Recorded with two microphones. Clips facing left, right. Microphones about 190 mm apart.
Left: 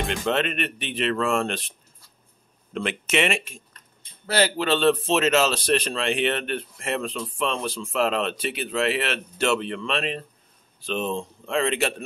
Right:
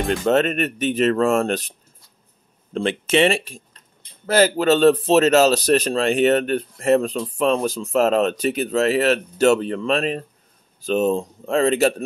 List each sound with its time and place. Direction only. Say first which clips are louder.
0.1 s a man's voice: right 9 dB; 40° right (ahead or behind)